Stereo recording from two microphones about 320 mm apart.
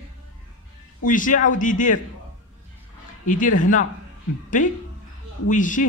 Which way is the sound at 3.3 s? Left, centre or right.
Left.